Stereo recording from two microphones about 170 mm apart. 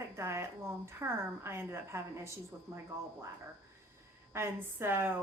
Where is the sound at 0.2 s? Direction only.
15° right (ahead or behind).